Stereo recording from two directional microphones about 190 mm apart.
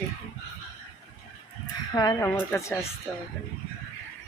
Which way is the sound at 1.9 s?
20° left (ahead or behind).